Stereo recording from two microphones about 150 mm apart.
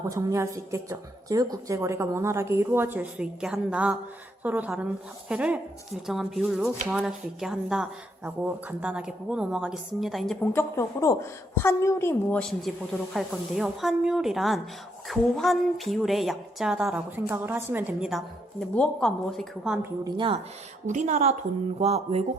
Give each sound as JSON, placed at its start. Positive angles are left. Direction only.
{"t": 0.0, "sound": "a woman's voice", "side_deg": -20}
{"t": 10.4, "sound": "a woman's voice", "side_deg": 15}
{"t": 18.7, "sound": "a woman's voice", "side_deg": 5}
{"t": 20.1, "sound": "speech", "side_deg": -35}
{"t": 20.8, "sound": "a woman's voice", "side_deg": -50}